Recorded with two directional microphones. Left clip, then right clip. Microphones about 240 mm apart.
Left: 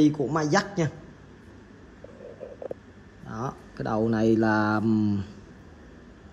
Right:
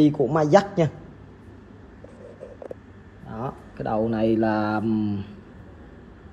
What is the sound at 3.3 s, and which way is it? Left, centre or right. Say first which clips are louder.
A man's voice: right 1 dB; centre.